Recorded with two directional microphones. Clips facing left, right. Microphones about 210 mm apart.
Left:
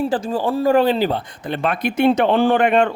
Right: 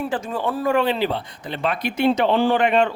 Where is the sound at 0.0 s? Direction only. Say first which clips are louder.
Left 4 dB; 35° left (ahead or behind).